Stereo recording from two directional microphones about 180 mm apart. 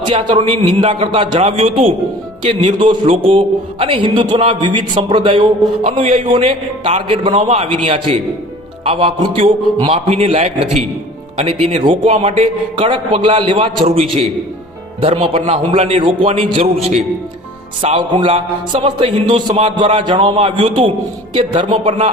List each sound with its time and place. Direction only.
0.1 s a man's voice: 35° right (ahead or behind)
17.8 s a man's voice: 35° right (ahead or behind)